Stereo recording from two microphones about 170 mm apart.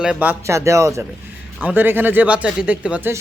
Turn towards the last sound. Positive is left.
turn(degrees=-5)  # may be behind; listen again after turning